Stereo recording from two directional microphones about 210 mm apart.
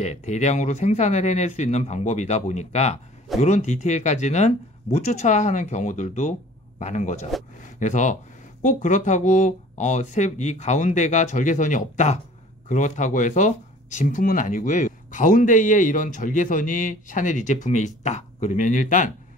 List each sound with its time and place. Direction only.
0.0 s speech: 35° left (ahead or behind)